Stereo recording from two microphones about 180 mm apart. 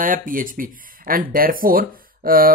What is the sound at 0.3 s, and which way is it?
Speech, 50° right (ahead or behind).